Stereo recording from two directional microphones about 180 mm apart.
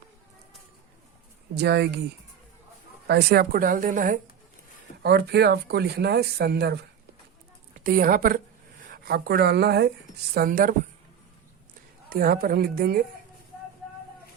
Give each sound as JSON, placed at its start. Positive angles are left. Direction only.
{"t": 1.5, "sound": "speech", "side_deg": -65}
{"t": 3.1, "sound": "speech", "side_deg": -65}
{"t": 5.0, "sound": "speech", "side_deg": -65}
{"t": 7.9, "sound": "a woman's voice", "side_deg": -50}
{"t": 10.3, "sound": "speech", "side_deg": -55}
{"t": 12.0, "sound": "speech", "side_deg": -55}